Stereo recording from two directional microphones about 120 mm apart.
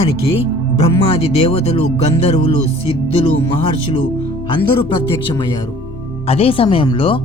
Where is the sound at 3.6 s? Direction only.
45° left (ahead or behind).